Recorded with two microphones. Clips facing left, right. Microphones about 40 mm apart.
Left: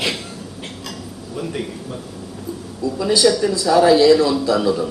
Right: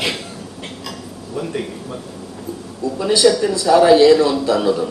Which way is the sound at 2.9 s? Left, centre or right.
Right.